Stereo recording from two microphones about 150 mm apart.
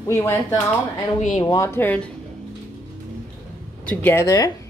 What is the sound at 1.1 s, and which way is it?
Speech, 50° left (ahead or behind).